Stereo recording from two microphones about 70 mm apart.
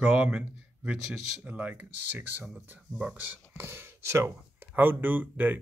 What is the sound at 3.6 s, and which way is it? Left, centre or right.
Speech, right.